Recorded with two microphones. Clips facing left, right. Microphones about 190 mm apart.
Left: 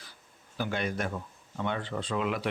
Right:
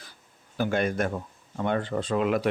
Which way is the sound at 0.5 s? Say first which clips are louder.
Right 6 dB; 50° right (ahead or behind).